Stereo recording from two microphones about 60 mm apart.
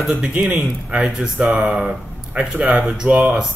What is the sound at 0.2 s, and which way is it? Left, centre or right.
Speech, right.